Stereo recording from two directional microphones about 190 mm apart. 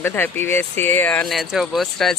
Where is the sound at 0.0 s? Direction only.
10° left (ahead or behind).